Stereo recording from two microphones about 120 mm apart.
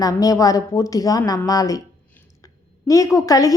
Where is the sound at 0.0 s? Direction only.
30° left (ahead or behind).